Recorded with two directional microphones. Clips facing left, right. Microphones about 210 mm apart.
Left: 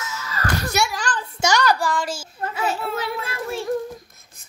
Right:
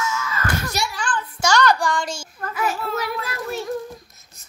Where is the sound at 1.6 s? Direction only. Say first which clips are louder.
Right 1 dB; 5° left (ahead or behind).